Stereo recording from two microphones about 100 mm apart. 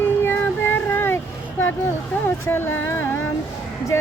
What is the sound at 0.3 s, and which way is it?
Child singing, 20° left (ahead or behind).